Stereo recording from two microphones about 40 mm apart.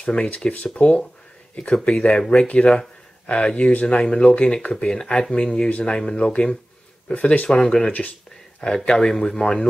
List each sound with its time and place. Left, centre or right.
0.0 s speech: left
4.9 s speech: left
5.7 s speech: left
5.9 s speech: left